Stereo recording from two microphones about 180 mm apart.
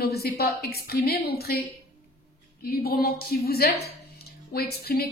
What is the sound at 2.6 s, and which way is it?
A woman's voice, 60° left (ahead or behind).